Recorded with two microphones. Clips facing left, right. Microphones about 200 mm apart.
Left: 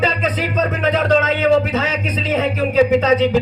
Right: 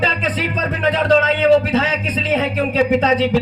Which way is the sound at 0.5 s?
35° right (ahead or behind).